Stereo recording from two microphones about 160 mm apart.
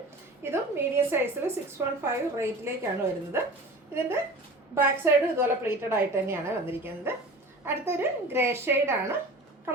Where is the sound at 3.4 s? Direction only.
15° right (ahead or behind).